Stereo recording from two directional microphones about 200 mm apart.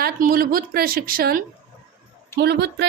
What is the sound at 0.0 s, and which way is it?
A woman's voice, 45° right (ahead or behind).